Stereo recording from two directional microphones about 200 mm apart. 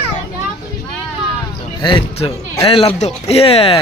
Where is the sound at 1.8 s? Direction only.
25° left (ahead or behind).